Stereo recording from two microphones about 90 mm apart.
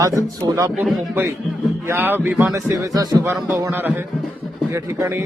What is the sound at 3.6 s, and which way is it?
A man's voice, 25° right (ahead or behind).